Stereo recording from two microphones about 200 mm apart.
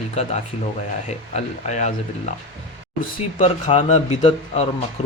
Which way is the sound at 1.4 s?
35° left (ahead or behind).